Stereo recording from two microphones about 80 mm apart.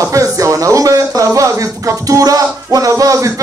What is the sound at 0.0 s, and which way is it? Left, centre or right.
Speech, right.